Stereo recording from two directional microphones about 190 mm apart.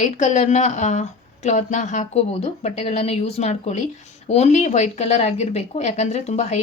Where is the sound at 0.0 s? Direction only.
40° left (ahead or behind).